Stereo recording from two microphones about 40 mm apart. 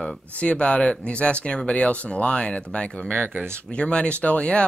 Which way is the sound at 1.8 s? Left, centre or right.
Left.